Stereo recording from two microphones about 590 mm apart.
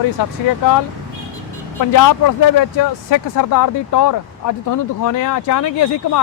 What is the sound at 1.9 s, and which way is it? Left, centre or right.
Speech, left.